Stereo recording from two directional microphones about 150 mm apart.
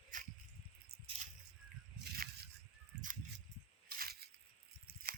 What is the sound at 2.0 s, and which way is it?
Crushing, 90° right.